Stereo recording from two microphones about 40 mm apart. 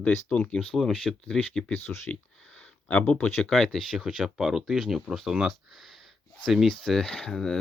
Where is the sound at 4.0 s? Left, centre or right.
Centre.